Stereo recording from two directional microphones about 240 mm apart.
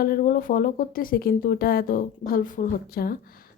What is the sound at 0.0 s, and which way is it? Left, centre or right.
A woman's voice, left.